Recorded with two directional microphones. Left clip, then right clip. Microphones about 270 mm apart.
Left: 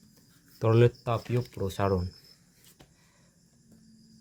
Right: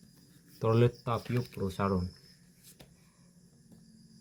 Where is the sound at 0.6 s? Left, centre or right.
Left.